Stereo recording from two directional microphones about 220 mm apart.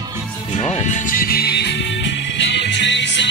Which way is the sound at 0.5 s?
30° left (ahead or behind).